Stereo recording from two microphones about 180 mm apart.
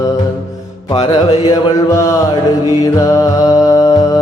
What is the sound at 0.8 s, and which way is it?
Mantra, 30° left (ahead or behind).